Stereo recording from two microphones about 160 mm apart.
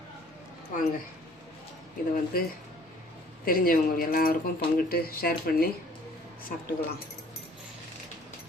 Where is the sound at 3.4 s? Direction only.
65° left (ahead or behind).